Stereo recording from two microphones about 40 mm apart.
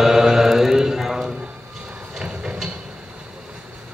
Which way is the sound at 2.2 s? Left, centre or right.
Right.